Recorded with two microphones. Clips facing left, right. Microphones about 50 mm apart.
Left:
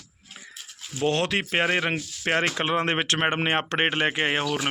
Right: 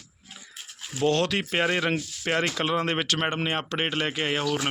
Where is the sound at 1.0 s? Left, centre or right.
Left.